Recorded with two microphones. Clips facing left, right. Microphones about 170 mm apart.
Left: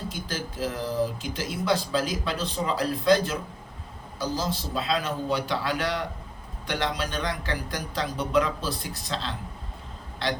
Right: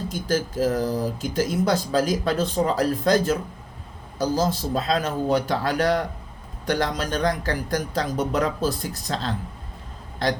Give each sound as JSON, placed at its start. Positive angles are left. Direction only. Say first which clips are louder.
{"t": 0.1, "sound": "speech", "louder": "right 9 dB", "side_deg": -45}